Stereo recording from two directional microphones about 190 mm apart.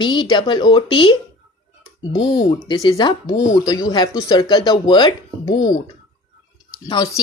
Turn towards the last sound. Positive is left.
turn(degrees=20)  # may be behind; listen again after turning